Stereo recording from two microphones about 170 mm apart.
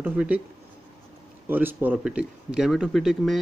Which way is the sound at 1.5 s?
10° right (ahead or behind).